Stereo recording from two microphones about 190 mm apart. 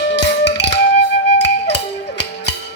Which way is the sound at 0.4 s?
65° left (ahead or behind).